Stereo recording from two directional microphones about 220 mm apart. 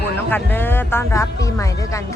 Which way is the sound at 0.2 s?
10° left (ahead or behind).